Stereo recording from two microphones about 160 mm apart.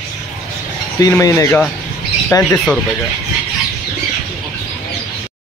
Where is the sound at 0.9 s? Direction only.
20° left (ahead or behind).